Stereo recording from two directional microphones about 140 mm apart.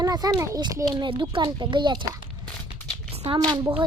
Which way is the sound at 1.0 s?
35° right (ahead or behind).